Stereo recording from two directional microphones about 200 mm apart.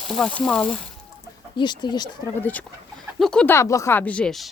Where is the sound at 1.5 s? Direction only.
20° left (ahead or behind).